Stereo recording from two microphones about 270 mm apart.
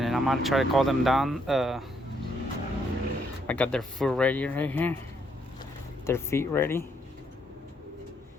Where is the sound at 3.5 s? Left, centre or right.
Centre.